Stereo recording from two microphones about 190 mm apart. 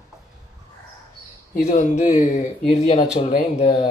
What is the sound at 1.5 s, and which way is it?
Speech, 45° left (ahead or behind).